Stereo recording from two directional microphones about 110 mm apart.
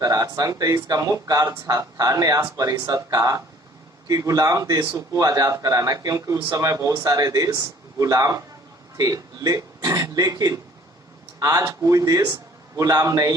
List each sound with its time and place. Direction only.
0.0 s speech: 30° right (ahead or behind)
9.0 s a sound: 30° right (ahead or behind)
11.3 s a man's voice: 30° right (ahead or behind)